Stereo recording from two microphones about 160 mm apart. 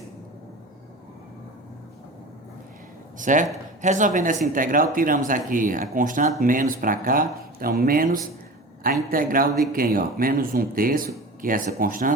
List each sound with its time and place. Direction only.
3.2 s speech: 55° right (ahead or behind)